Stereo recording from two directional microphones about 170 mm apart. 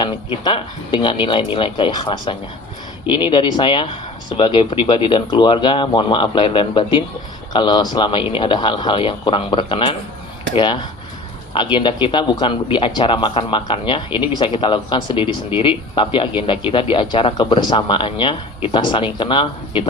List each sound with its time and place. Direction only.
0.0 s speech: 30° left (ahead or behind)